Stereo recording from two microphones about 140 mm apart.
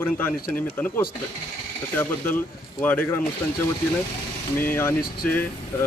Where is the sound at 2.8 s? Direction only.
15° left (ahead or behind).